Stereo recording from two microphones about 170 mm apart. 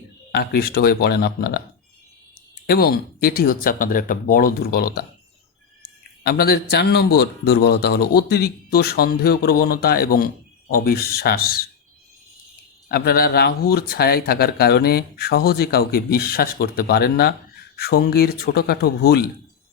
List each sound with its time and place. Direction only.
0.3 s a man's voice: 65° left (ahead or behind)
2.6 s a man's voice: 65° left (ahead or behind)
6.2 s a man's voice: 65° left (ahead or behind)
12.9 s a man's voice: 65° left (ahead or behind)